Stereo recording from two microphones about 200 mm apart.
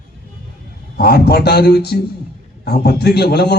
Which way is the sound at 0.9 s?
50° left (ahead or behind).